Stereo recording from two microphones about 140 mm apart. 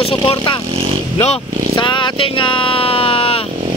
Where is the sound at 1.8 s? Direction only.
35° left (ahead or behind).